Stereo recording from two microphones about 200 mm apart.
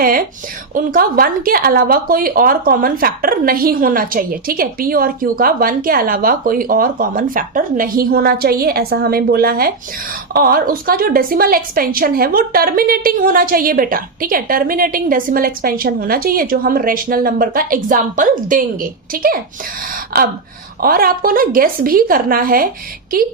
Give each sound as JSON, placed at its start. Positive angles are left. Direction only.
{"t": 0.0, "sound": "speech", "side_deg": -45}